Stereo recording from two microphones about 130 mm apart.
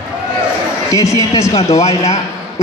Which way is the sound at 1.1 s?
25° left (ahead or behind).